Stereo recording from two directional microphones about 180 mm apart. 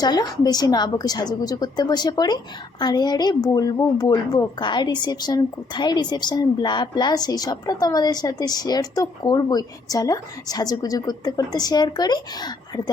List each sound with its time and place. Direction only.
0.0 s a woman's voice: 20° left (ahead or behind)